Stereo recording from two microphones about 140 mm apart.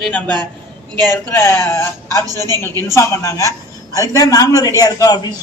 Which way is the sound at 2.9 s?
20° left (ahead or behind).